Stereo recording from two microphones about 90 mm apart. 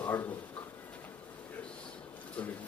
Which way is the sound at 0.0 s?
20° left (ahead or behind).